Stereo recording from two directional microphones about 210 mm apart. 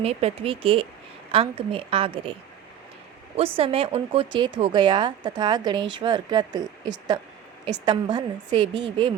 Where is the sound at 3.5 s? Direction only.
25° right (ahead or behind).